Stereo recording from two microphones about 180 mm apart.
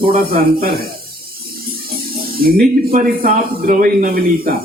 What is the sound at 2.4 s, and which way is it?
A man's voice, 55° right (ahead or behind).